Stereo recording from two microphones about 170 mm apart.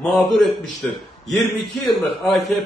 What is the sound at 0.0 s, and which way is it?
A man's voice, centre (ahead or behind).